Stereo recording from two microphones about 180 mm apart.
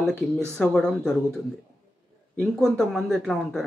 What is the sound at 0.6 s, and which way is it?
Speech, 5° left (ahead or behind).